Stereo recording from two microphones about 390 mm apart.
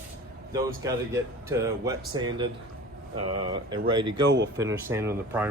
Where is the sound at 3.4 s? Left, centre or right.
Centre.